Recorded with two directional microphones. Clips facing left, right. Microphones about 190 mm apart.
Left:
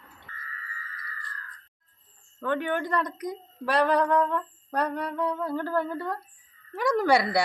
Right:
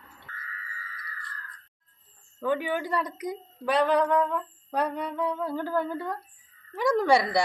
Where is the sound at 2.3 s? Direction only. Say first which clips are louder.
Even; 10° right (ahead or behind).